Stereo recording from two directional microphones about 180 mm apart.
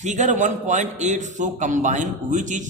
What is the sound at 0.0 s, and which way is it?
A man's voice, 40° right (ahead or behind).